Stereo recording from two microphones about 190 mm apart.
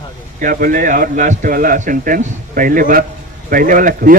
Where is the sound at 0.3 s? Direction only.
45° right (ahead or behind).